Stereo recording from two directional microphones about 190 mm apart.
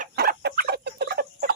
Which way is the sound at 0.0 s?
55° right (ahead or behind).